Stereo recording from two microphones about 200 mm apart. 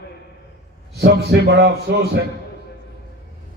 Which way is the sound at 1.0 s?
55° right (ahead or behind).